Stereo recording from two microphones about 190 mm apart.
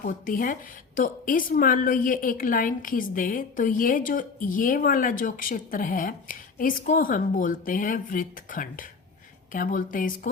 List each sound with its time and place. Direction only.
0.0 s a woman's voice: 45° left (ahead or behind)